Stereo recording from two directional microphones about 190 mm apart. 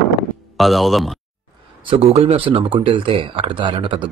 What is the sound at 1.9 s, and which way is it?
Speech, 30° right (ahead or behind).